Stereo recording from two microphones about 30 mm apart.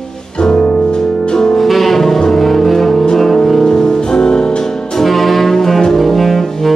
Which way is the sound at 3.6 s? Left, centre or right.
Left.